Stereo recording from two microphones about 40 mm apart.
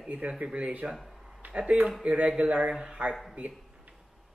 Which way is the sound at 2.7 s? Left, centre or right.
Centre.